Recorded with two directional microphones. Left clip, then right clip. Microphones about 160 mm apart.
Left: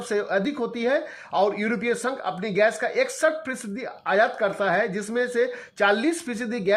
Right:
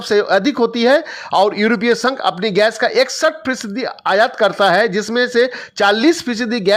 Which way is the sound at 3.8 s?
40° right (ahead or behind).